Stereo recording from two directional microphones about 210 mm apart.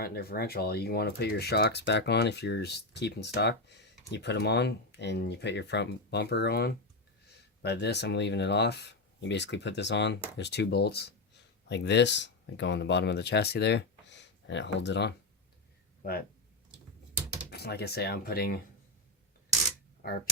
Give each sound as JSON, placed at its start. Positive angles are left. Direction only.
{"t": 0.0, "sound": "speech", "side_deg": 45}
{"t": 17.5, "sound": "speech", "side_deg": 50}